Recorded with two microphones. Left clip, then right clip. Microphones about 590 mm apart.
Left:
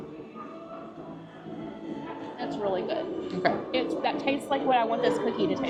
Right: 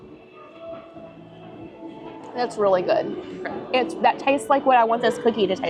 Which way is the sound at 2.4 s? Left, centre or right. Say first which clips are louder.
Right 10 dB; right.